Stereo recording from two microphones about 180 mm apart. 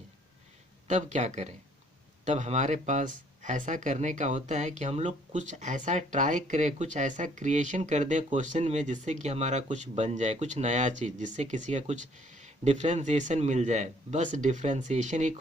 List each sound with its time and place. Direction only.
0.9 s speech: 40° right (ahead or behind)